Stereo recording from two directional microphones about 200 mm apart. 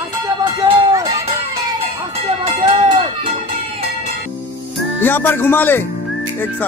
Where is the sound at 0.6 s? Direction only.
15° right (ahead or behind).